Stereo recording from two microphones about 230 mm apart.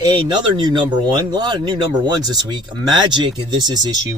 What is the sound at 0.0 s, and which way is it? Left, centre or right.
Speech, centre.